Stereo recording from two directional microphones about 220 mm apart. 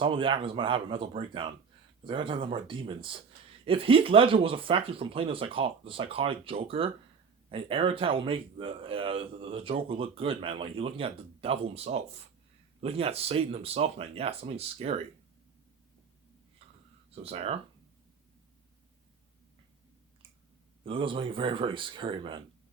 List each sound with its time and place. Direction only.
0.0 s speech: 25° right (ahead or behind)
17.1 s speech: 25° right (ahead or behind)
20.8 s speech: 25° right (ahead or behind)